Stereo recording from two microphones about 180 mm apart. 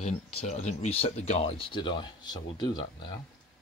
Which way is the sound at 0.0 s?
35° left (ahead or behind).